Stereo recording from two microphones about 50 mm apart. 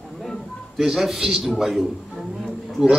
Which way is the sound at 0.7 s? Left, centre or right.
Centre.